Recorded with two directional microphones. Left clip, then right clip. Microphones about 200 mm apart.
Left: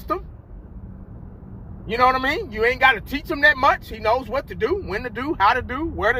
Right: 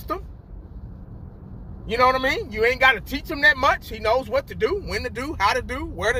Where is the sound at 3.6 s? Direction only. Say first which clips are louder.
Left 2 dB; 25° right (ahead or behind).